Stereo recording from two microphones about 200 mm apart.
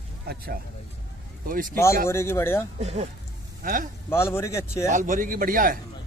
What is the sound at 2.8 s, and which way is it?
Speech, 30° right (ahead or behind).